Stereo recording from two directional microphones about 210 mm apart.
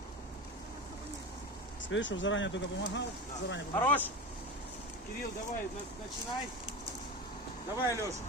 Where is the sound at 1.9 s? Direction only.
60° left (ahead or behind).